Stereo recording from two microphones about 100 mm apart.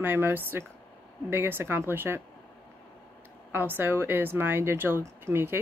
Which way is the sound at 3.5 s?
20° right (ahead or behind).